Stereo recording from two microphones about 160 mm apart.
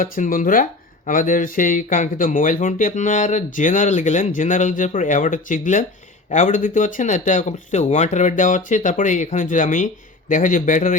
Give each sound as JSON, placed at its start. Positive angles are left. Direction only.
{"t": 0.0, "sound": "speech", "side_deg": 55}